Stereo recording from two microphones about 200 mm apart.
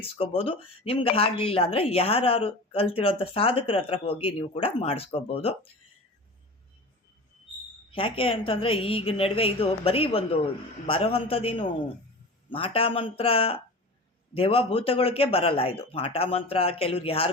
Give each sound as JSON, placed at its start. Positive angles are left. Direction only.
{"t": 0.2, "sound": "speech", "side_deg": 25}
{"t": 7.9, "sound": "speech", "side_deg": 25}